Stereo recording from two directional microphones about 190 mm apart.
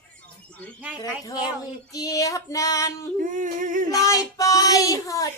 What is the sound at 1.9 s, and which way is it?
Child singing, 20° left (ahead or behind).